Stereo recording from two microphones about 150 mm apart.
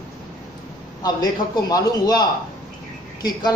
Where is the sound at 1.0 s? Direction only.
25° left (ahead or behind).